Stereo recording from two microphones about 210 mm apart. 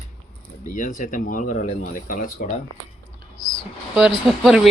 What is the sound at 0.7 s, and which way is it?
Speech, 40° left (ahead or behind).